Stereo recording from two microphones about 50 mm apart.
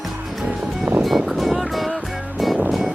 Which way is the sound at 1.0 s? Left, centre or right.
Centre.